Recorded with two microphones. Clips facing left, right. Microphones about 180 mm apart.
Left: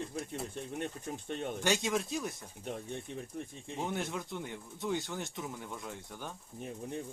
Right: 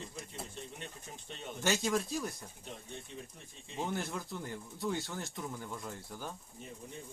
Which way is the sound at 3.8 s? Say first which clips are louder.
Left 1 dB; centre (ahead or behind).